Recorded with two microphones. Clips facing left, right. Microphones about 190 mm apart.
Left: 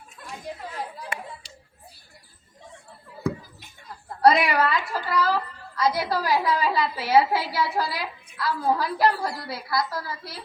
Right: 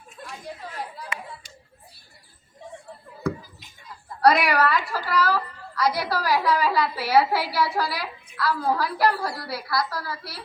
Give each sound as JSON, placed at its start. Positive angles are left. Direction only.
{"t": 4.2, "sound": "a woman's voice", "side_deg": 20}